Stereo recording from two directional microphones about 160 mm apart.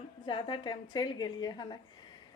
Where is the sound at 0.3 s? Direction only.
30° left (ahead or behind).